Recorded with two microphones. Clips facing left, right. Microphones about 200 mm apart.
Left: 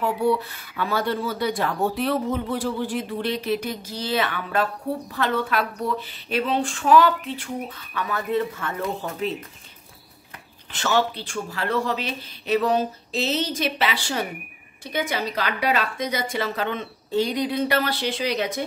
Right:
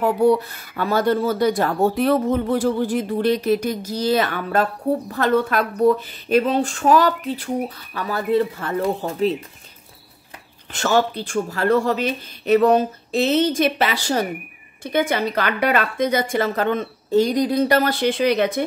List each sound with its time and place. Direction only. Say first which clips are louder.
0.0 s speech: right 6 dB; 45° right (ahead or behind)
10.7 s speech: right 4 dB; 45° right (ahead or behind)
14.8 s speech: right 6 dB; 55° right (ahead or behind)